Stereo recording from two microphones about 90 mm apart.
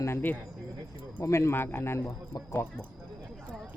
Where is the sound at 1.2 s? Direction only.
30° left (ahead or behind).